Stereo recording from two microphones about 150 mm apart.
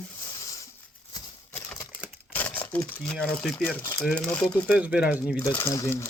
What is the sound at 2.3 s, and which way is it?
Crumpling, 10° left (ahead or behind).